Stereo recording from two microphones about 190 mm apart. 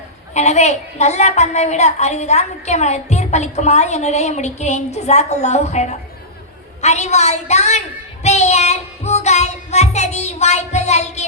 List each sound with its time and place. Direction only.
0.3 s a child's voice: 35° left (ahead or behind)